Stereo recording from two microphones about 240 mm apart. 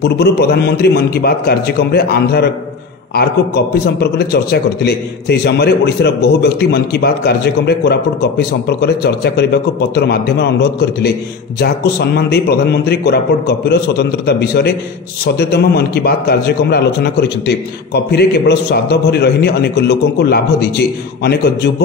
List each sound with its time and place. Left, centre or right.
0.0 s a man's voice: left